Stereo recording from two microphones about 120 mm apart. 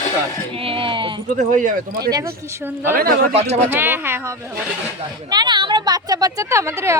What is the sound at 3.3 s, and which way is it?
Speech, 60° right (ahead or behind).